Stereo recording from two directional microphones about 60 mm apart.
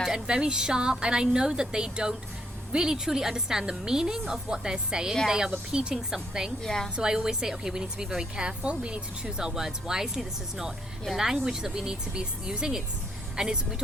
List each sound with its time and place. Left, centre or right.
0.0 s speech: centre
6.6 s a woman's voice: centre
6.9 s speech: centre